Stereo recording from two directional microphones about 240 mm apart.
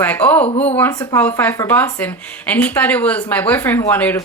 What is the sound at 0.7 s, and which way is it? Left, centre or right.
Speech, centre.